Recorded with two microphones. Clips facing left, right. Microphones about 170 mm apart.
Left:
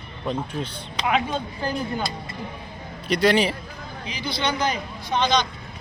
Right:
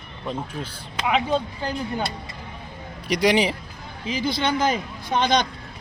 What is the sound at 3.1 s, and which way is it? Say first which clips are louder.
Speech: even; 15° right (ahead or behind).